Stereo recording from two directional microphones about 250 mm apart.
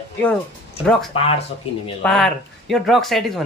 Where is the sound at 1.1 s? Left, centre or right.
Left.